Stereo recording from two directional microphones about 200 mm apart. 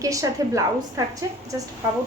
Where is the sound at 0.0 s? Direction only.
15° right (ahead or behind).